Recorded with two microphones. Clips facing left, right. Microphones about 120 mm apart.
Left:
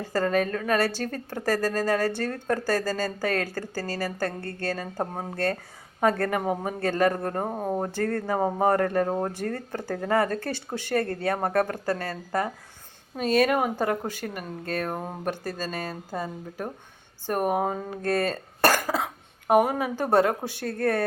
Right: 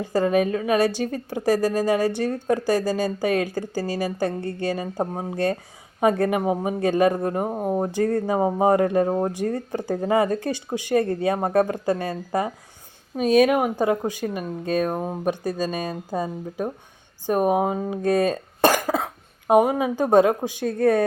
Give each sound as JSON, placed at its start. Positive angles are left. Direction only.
{"t": 0.0, "sound": "speech", "side_deg": -15}